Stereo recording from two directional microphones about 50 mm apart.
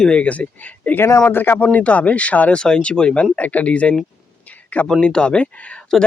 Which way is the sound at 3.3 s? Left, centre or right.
Left.